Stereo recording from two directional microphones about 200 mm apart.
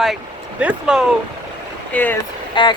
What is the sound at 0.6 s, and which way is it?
Speech, 5° right (ahead or behind).